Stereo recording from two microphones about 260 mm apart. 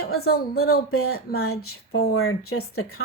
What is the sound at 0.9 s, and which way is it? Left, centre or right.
Speech, left.